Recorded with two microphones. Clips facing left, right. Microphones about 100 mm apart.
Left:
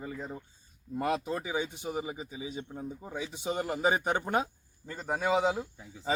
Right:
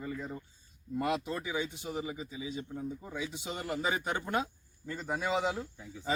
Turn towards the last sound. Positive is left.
turn(degrees=10)  # may be behind; listen again after turning